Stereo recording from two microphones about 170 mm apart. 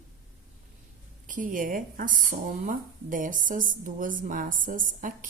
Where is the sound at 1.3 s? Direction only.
50° right (ahead or behind).